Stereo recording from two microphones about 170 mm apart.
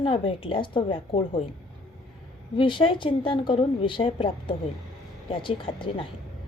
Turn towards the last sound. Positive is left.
turn(degrees=30)  # may be behind; listen again after turning